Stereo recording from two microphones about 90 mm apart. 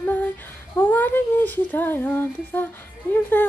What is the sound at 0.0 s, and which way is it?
Female singing, 20° left (ahead or behind).